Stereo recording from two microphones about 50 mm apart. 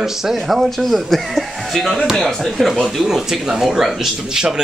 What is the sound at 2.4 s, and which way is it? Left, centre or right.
A man's voice, centre.